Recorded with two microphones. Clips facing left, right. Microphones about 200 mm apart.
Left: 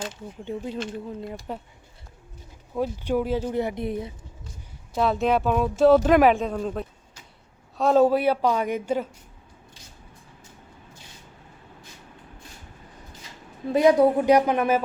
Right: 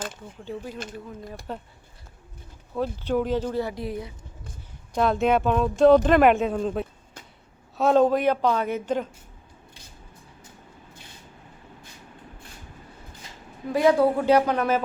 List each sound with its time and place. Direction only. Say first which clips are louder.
0.4 s speech: left 3 dB; 25° left (ahead or behind)
1.5 s speech: right 1 dB; 10° left (ahead or behind)
2.7 s speech: even; 10° left (ahead or behind)
4.9 s speech: right 1 dB; centre (ahead or behind)
13.7 s speech: left 2 dB; 20° left (ahead or behind)